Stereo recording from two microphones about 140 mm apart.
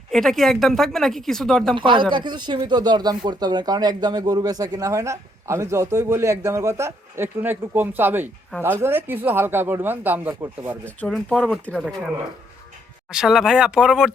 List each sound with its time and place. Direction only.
0.1 s speech: centre (ahead or behind)
1.7 s speech: 35° right (ahead or behind); by 10.8 s 15° right (ahead or behind)
10.8 s speech: 5° left (ahead or behind)
13.1 s speech: 5° right (ahead or behind)